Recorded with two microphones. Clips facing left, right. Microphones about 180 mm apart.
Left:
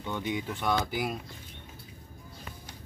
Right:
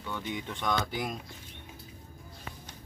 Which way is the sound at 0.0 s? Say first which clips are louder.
Left 4 dB; 15° left (ahead or behind).